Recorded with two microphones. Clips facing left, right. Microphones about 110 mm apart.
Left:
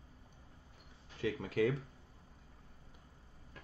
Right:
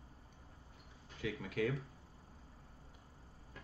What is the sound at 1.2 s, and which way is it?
Speech, 35° left (ahead or behind).